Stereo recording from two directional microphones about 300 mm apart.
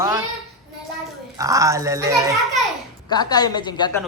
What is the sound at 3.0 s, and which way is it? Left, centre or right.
Speech, centre.